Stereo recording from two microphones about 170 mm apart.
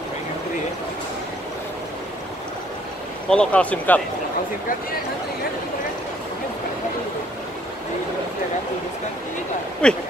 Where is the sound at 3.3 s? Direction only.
5° left (ahead or behind).